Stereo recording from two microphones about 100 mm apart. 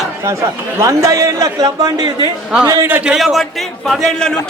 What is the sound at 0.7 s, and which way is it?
A man's voice, 30° right (ahead or behind).